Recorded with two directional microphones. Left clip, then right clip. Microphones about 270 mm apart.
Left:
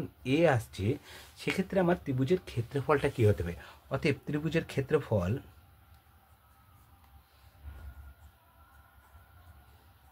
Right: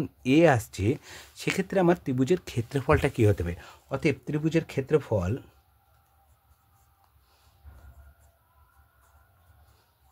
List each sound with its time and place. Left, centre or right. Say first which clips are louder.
0.2 s speech: right 6 dB; right